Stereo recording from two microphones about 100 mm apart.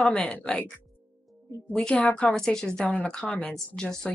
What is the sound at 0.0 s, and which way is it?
Speech, 10° left (ahead or behind).